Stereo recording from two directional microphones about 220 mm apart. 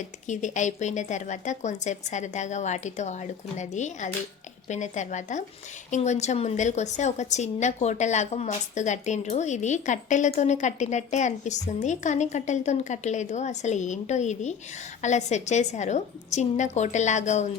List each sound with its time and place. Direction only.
0.3 s a woman's voice: 35° left (ahead or behind)